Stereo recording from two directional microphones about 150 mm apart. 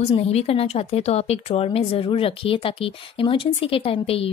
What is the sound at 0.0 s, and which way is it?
A woman's voice, 45° left (ahead or behind).